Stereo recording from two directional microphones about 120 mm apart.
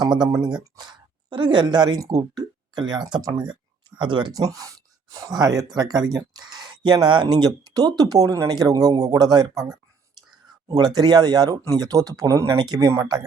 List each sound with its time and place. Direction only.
0.0 s speech: 35° right (ahead or behind)
4.3 s speech: 30° right (ahead or behind)
6.5 s a sound: 35° right (ahead or behind)
7.1 s speech: 40° right (ahead or behind)